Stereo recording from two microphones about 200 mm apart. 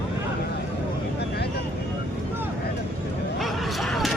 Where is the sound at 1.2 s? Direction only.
55° left (ahead or behind).